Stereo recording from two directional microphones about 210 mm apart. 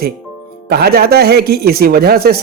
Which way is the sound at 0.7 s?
50° right (ahead or behind).